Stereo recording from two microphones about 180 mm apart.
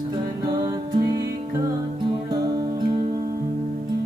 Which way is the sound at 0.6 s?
20° right (ahead or behind).